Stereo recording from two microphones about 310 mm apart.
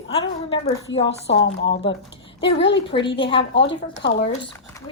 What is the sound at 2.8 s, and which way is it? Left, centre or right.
Speech, centre.